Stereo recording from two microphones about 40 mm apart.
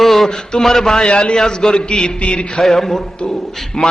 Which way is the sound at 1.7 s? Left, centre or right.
Left.